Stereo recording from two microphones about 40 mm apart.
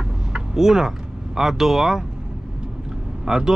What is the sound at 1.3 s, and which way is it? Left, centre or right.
Speech, centre.